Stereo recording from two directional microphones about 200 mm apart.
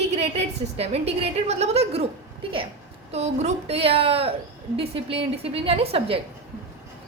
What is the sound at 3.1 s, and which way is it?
A woman's voice, 35° right (ahead or behind).